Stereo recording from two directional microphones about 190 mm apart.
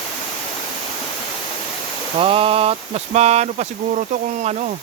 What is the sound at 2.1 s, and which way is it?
Speech, 30° right (ahead or behind).